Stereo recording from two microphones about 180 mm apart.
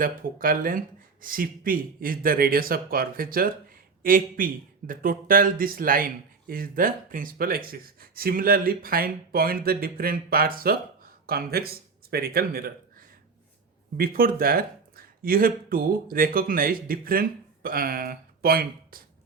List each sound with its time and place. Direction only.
0.0 s speech: 50° right (ahead or behind)